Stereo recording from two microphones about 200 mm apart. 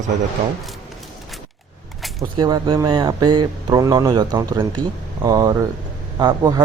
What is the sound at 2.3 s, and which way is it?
Speech, 20° right (ahead or behind).